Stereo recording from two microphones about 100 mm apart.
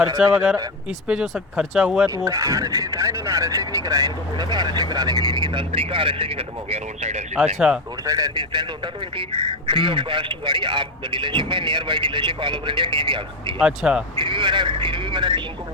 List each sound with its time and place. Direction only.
0.2 s speech: 10° right (ahead or behind)
2.0 s speech: 35° right (ahead or behind); by 7.1 s 90° right
7.6 s speech: 10° right (ahead or behind)
8.0 s speech: 40° right (ahead or behind); by 13.6 s 55° right (ahead or behind)
13.6 s speech: 10° right (ahead or behind)
14.2 s speech: 55° right (ahead or behind)